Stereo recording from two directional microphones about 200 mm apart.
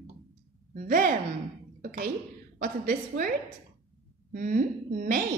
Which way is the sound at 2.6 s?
45° right (ahead or behind).